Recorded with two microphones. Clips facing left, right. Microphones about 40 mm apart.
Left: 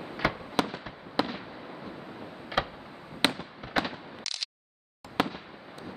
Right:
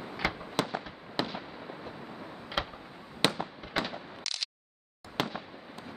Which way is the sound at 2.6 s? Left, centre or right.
Centre.